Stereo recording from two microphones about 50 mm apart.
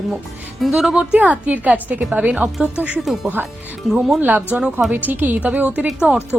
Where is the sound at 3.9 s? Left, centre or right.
Centre.